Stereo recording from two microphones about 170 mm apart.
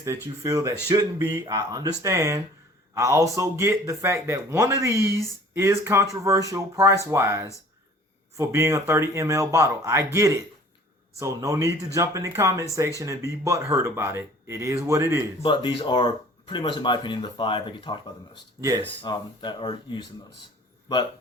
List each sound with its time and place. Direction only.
0.0 s speech: 15° right (ahead or behind)
15.4 s speech: 30° left (ahead or behind)